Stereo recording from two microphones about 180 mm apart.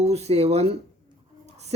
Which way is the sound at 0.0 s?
35° right (ahead or behind).